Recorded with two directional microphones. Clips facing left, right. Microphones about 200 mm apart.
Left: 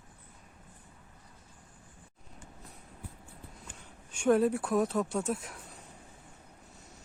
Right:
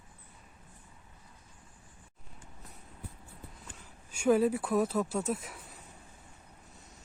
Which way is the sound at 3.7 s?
5° right (ahead or behind).